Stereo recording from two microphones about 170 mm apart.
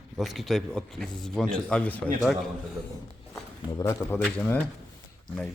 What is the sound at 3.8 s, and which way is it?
Speech, 15° left (ahead or behind).